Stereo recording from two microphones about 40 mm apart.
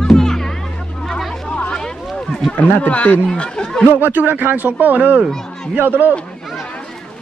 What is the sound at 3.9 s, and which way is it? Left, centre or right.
A man's voice, right.